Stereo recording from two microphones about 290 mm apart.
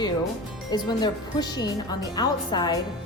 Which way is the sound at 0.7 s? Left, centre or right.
Centre.